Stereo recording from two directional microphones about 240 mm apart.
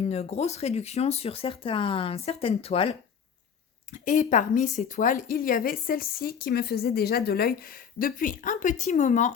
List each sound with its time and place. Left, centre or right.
0.1 s speech: left
4.0 s speech: left